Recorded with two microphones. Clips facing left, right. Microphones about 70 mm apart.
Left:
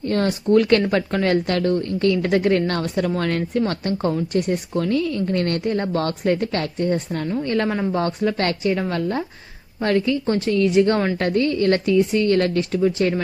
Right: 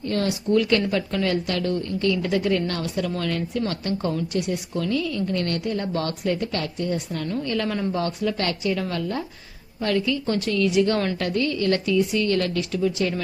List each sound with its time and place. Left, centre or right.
0.0 s a woman's voice: left
3.9 s a woman's voice: left